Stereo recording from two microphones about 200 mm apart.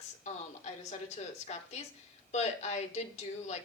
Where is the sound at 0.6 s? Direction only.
35° left (ahead or behind).